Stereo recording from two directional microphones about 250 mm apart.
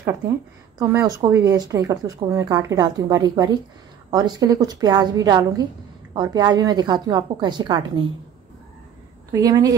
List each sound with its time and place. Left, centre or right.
0.7 s a woman's voice: centre
9.3 s a woman's voice: centre